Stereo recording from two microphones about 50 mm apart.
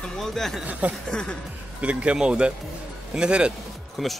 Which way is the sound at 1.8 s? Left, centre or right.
Right.